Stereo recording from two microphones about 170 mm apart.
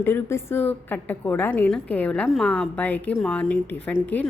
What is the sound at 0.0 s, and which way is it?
A woman's voice, 15° left (ahead or behind).